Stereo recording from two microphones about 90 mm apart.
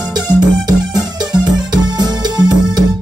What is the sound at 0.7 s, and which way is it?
Music, 50° right (ahead or behind).